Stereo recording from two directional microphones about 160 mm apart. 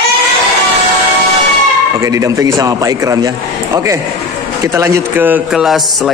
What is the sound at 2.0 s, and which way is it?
A man's voice, 20° right (ahead or behind).